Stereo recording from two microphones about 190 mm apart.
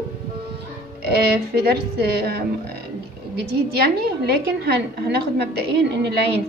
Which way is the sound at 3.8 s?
55° right (ahead or behind).